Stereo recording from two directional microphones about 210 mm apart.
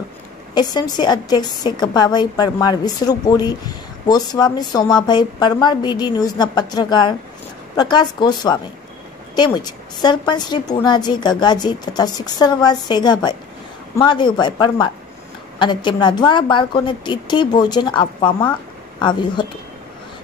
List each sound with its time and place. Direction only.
0.6 s a woman's voice: 20° left (ahead or behind)